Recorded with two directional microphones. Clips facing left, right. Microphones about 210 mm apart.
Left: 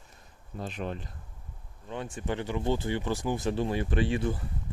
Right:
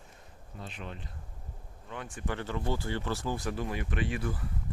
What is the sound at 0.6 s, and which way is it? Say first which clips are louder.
Speech: left 8 dB; 45° left (ahead or behind).